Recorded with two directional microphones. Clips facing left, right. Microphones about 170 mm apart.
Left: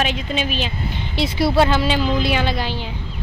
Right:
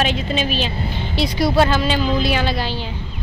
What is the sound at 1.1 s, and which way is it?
A woman's voice, 25° left (ahead or behind).